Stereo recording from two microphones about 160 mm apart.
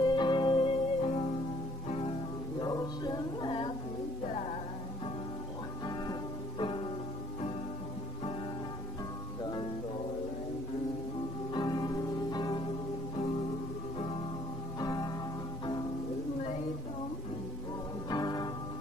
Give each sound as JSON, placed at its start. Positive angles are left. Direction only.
{"t": 0.0, "sound": "music", "side_deg": 30}
{"t": 2.6, "sound": "a sound", "side_deg": 25}
{"t": 4.3, "sound": "music", "side_deg": 40}
{"t": 6.6, "sound": "music", "side_deg": 30}
{"t": 9.4, "sound": "music", "side_deg": 25}
{"t": 11.5, "sound": "music", "side_deg": 25}
{"t": 13.9, "sound": "music", "side_deg": 35}
{"t": 14.8, "sound": "music", "side_deg": 25}
{"t": 18.1, "sound": "music", "side_deg": 25}